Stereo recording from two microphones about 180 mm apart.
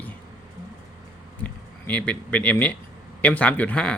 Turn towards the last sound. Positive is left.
turn(degrees=5)  # may be behind; listen again after turning